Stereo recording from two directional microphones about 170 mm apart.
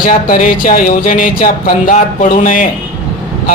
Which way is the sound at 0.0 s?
55° left (ahead or behind).